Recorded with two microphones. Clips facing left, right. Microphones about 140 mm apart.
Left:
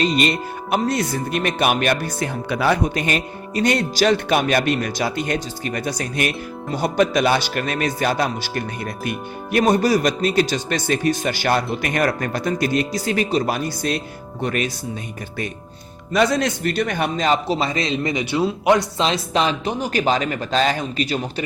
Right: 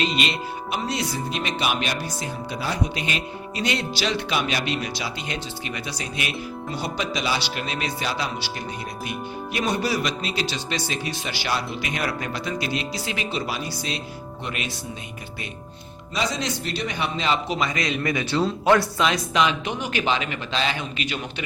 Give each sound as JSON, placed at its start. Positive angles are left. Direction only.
{"t": 0.0, "sound": "speech", "side_deg": 45}
{"t": 16.1, "sound": "a man's voice", "side_deg": 55}